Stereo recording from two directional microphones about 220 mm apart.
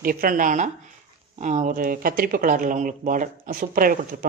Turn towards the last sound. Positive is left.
turn(degrees=-40)  # may be behind; listen again after turning